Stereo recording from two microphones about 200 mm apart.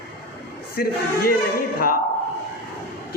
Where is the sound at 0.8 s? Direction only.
50° left (ahead or behind).